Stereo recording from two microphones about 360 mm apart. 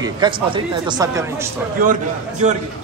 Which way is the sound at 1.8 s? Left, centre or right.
Right.